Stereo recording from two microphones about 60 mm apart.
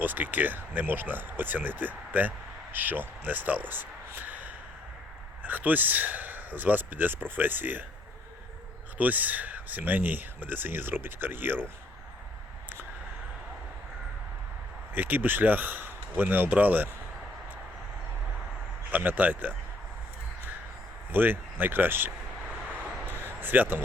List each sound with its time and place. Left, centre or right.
0.0 s speech: right
9.0 s speech: right
14.9 s speech: right
18.9 s speech: right
21.1 s speech: right
23.4 s speech: right